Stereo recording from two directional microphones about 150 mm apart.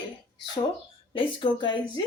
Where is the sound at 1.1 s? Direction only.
35° left (ahead or behind).